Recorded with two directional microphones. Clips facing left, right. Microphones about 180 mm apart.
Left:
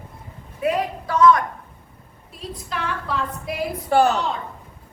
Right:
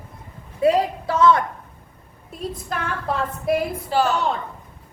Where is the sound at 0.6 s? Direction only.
30° right (ahead or behind).